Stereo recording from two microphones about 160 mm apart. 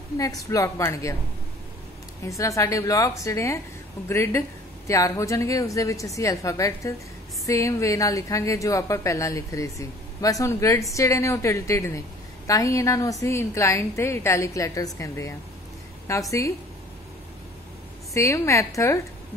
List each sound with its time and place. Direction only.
0.2 s a woman's voice: 20° left (ahead or behind)
2.2 s a woman's voice: 20° left (ahead or behind)
18.1 s a woman's voice: 15° left (ahead or behind)